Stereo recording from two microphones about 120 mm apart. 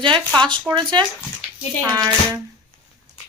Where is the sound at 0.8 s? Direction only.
40° right (ahead or behind).